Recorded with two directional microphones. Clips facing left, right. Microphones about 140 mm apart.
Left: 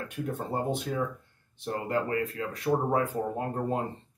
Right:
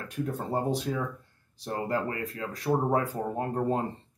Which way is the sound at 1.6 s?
35° right (ahead or behind).